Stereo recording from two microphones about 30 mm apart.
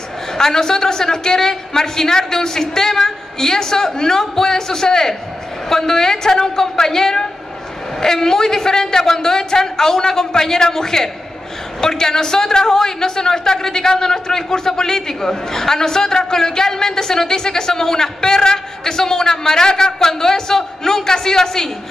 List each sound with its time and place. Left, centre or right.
0.3 s a woman's voice: centre